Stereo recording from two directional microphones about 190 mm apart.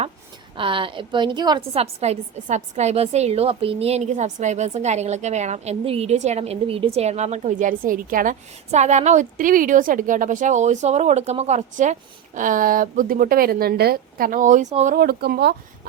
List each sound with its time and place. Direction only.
0.5 s a woman's voice: 25° right (ahead or behind)
14.9 s speech: 55° right (ahead or behind)